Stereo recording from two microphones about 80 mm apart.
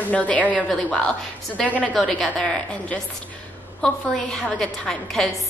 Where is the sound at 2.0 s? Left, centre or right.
Centre.